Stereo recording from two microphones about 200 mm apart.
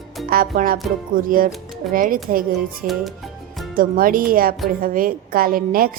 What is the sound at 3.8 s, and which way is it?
Speech, 45° right (ahead or behind).